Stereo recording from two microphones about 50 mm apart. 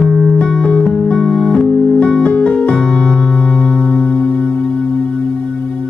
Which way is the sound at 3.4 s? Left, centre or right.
Centre.